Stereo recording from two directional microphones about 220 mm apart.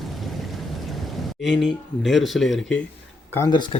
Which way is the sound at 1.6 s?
Centre (ahead or behind).